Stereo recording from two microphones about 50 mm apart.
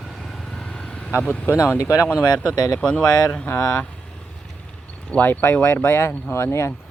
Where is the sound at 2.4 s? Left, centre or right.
Left.